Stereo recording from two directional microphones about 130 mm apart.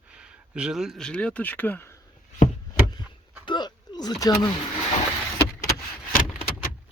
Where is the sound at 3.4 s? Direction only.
35° left (ahead or behind).